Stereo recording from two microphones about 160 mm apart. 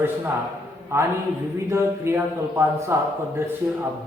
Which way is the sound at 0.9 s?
15° right (ahead or behind).